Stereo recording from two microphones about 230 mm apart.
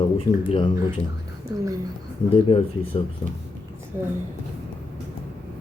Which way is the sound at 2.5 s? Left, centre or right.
Left.